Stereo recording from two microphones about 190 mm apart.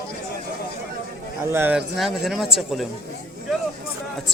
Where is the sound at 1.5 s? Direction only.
10° right (ahead or behind).